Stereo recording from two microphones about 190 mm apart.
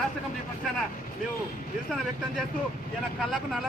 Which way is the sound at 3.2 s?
Centre (ahead or behind).